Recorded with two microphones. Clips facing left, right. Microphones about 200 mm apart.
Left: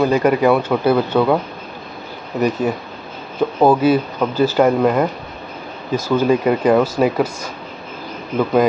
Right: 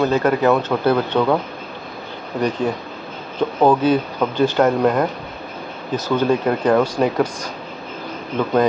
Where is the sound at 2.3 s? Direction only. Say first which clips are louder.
Left 2 dB; 10° left (ahead or behind).